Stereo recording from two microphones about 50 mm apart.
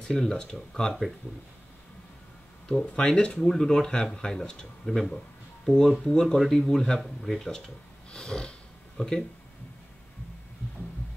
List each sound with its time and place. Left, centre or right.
0.0 s speech: centre
3.0 s speech: centre